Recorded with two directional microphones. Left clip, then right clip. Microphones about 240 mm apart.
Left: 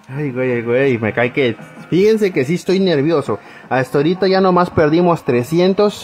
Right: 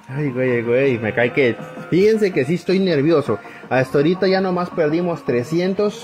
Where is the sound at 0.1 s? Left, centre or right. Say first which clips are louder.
Left 1 dB; centre.